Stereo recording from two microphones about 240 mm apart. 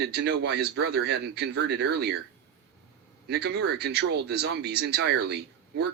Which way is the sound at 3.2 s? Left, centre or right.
Right.